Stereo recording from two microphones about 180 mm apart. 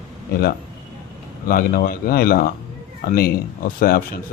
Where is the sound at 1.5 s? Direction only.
50° left (ahead or behind).